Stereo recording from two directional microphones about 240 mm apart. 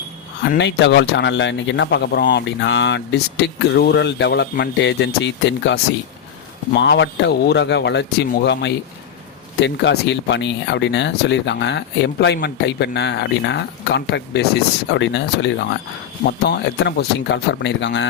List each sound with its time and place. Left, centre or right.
0.4 s speech: left